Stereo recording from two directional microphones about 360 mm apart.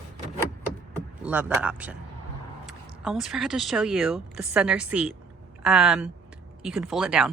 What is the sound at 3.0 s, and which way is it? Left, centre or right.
A woman's voice, centre.